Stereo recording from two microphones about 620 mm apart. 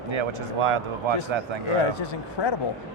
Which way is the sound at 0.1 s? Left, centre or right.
Right.